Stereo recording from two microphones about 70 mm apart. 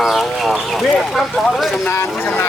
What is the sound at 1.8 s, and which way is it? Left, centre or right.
Speech, left.